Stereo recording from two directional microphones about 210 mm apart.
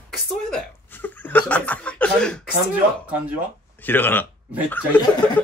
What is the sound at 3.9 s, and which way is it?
Speech, 10° left (ahead or behind).